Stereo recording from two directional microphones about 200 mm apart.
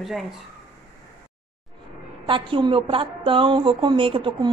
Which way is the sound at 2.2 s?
25° right (ahead or behind).